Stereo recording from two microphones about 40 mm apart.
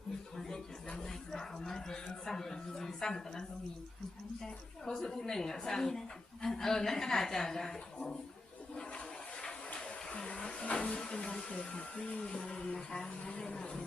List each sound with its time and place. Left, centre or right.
0.3 s a sound: centre
0.9 s a woman's voice: centre
8.7 s toilet flush: left
9.7 s a sound: left
10.9 s speech: centre
13.1 s a woman's voice: left
13.5 s speech: centre